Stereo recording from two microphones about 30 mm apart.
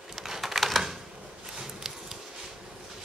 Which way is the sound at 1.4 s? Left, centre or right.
Centre.